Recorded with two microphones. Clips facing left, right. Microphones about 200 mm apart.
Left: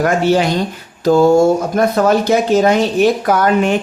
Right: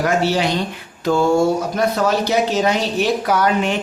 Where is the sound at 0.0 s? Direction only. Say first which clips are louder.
Left 4 dB; 50° left (ahead or behind).